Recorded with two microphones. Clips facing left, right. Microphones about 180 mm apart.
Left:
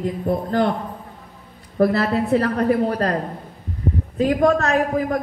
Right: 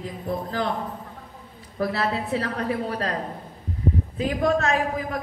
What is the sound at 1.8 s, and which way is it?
A woman's voice, 45° left (ahead or behind).